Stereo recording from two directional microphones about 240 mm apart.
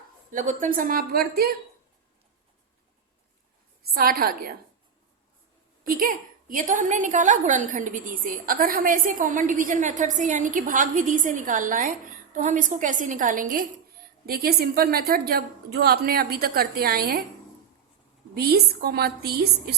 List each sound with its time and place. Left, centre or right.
0.3 s a woman's voice: right
3.9 s a woman's voice: right
5.9 s a woman's voice: right
18.3 s a woman's voice: right